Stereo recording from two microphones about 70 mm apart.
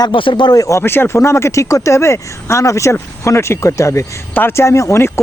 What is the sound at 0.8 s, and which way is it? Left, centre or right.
Speech, left.